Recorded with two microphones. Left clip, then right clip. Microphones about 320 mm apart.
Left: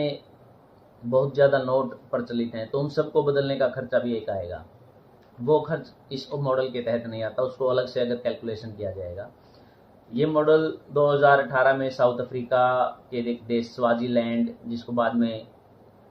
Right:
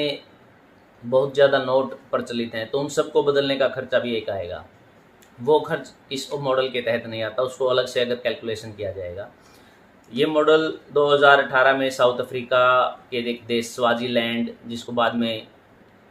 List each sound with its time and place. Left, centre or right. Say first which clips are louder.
1.4 s speech: right 3 dB; right